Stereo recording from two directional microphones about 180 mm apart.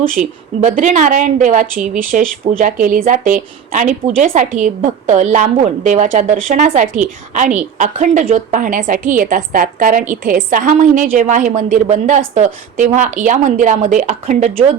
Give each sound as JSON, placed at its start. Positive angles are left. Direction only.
{"t": 0.0, "sound": "a woman's voice", "side_deg": -50}